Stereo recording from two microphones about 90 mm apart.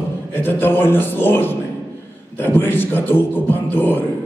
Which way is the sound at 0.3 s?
25° left (ahead or behind).